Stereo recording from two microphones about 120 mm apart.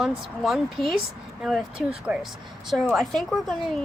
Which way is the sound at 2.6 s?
Centre (ahead or behind).